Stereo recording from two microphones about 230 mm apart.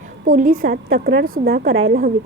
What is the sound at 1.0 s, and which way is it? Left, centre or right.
Speech, right.